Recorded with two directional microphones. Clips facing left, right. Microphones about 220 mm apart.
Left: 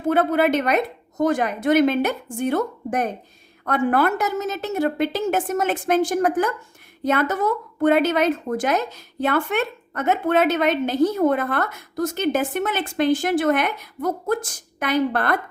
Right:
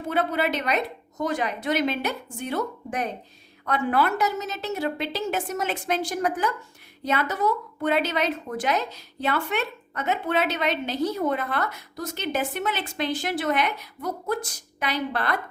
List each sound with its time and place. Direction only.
0.1 s a woman's voice: 50° left (ahead or behind)